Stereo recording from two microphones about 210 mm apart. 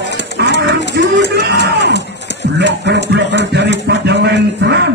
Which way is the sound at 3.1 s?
55° right (ahead or behind).